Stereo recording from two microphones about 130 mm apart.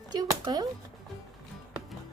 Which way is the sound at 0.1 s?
30° right (ahead or behind).